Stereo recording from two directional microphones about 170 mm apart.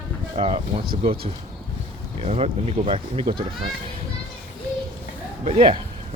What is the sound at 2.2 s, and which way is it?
Speech, 40° right (ahead or behind).